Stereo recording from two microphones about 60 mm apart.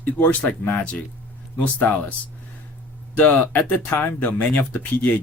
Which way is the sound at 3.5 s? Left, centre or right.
Left.